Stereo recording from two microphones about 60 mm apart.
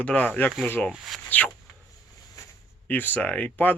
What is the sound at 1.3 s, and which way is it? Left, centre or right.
Speech, left.